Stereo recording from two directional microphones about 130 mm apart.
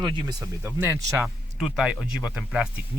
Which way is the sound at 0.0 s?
35° right (ahead or behind).